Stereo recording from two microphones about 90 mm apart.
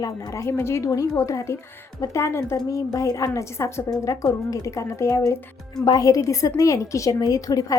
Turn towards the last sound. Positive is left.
turn(degrees=40)  # may be behind; listen again after turning